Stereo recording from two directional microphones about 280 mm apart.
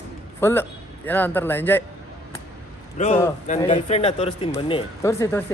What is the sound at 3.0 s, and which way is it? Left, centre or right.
Speech, left.